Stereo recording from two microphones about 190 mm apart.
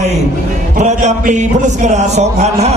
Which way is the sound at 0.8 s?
40° right (ahead or behind).